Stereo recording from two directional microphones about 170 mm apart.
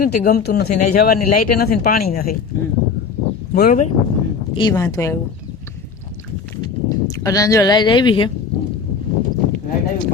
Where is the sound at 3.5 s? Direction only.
55° left (ahead or behind).